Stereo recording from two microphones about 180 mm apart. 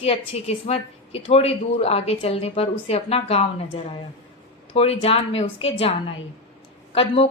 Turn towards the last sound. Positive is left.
turn(degrees=30)  # may be behind; listen again after turning